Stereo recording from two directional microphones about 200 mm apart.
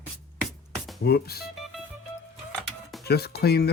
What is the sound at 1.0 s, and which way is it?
Speech, 50° left (ahead or behind).